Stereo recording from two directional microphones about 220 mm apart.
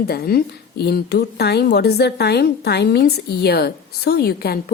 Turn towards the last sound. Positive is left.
turn(degrees=45)  # may be behind; listen again after turning